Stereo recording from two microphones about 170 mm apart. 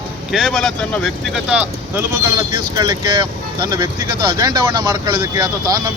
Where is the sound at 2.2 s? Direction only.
25° right (ahead or behind).